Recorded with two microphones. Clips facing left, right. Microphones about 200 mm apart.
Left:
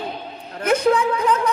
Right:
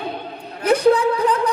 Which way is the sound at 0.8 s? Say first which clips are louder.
Right 4 dB; 35° right (ahead or behind).